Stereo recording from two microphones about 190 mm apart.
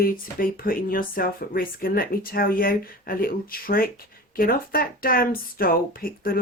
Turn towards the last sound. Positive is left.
turn(degrees=50)  # may be behind; listen again after turning